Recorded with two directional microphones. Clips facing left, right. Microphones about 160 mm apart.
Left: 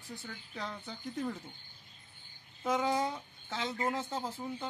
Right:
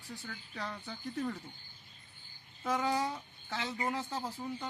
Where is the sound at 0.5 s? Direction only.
15° left (ahead or behind).